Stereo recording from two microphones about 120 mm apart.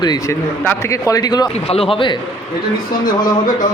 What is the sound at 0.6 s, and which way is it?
Speech, 20° left (ahead or behind).